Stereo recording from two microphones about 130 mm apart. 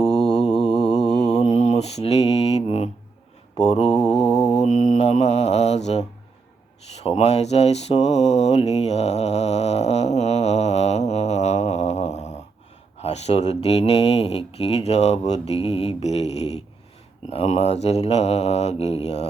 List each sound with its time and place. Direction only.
0.0 s mantra: 5° left (ahead or behind)
1.4 s mantra: 60° left (ahead or behind)
3.9 s mantra: 5° left (ahead or behind)
4.6 s mantra: 65° left (ahead or behind)
6.9 s speech: 50° left (ahead or behind)
17.2 s mantra: 50° left (ahead or behind)